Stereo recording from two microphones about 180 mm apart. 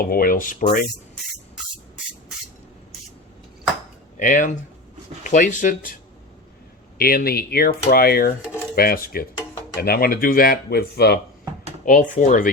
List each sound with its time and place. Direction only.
0.0 s speech: 55° left (ahead or behind)
4.2 s speech: 45° left (ahead or behind)
7.0 s speech: 55° left (ahead or behind)
11.9 s speech: 45° left (ahead or behind)